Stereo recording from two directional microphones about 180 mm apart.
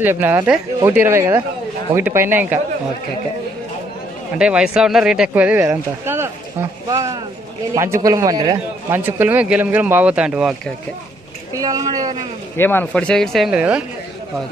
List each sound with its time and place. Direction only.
0.0 s speech: 10° right (ahead or behind)
4.4 s speech: 5° right (ahead or behind)
11.5 s a woman's voice: 20° right (ahead or behind)
12.5 s speech: 10° left (ahead or behind); by 13.8 s 5° right (ahead or behind)